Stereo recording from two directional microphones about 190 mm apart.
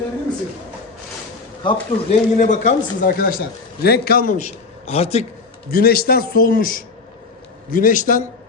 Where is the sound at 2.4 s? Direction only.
40° left (ahead or behind).